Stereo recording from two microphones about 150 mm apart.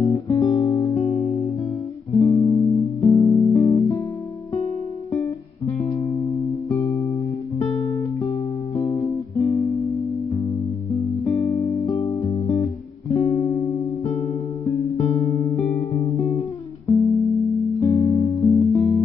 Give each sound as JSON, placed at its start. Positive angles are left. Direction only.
{"t": 0.0, "sound": "music", "side_deg": 20}
{"t": 5.1, "sound": "music", "side_deg": 20}
{"t": 6.8, "sound": "music", "side_deg": 45}
{"t": 7.6, "sound": "music", "side_deg": 30}
{"t": 11.0, "sound": "music", "side_deg": 25}
{"t": 15.5, "sound": "music", "side_deg": 45}
{"t": 15.9, "sound": "guitar", "side_deg": 25}
{"t": 17.2, "sound": "music", "side_deg": 0}
{"t": 17.7, "sound": "music", "side_deg": 20}